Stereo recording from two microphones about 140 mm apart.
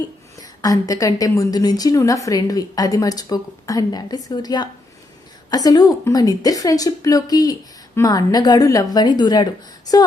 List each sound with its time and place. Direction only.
0.3 s a woman's voice: 25° left (ahead or behind)